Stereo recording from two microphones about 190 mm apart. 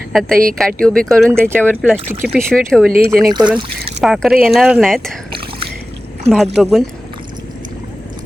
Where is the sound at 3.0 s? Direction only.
25° right (ahead or behind).